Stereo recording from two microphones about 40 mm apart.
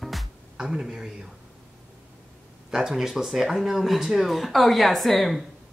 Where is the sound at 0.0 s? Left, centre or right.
Centre.